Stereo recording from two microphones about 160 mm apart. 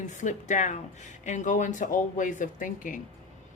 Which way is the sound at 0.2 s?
50° left (ahead or behind).